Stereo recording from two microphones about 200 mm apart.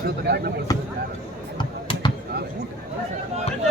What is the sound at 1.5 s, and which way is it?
Basketball bounce, 25° left (ahead or behind).